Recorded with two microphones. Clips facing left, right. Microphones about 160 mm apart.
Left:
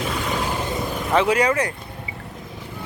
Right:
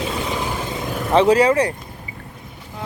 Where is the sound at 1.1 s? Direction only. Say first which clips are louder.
Right 5 dB; 30° right (ahead or behind).